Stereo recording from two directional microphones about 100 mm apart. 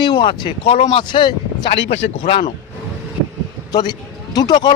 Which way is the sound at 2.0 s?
75° left (ahead or behind).